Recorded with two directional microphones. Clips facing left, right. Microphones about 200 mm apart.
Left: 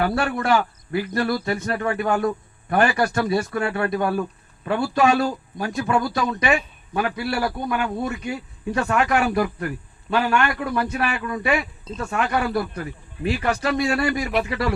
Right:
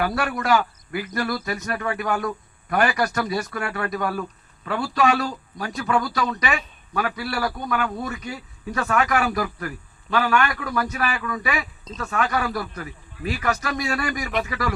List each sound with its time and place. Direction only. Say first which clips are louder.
0.0 s speech: left 2 dB; 30° left (ahead or behind)